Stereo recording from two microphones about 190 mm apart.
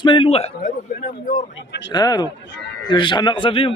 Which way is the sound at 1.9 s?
20° left (ahead or behind).